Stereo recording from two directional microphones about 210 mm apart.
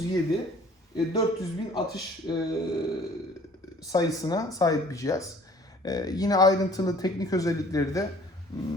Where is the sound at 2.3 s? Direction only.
20° left (ahead or behind).